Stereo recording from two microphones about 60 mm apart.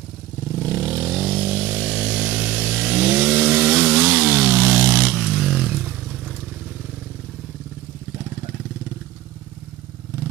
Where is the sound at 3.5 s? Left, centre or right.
Right.